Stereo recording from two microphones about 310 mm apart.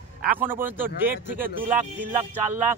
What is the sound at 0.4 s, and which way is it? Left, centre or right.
Speech, centre.